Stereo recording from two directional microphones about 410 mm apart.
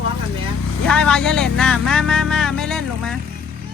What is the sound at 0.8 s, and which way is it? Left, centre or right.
Speech, centre.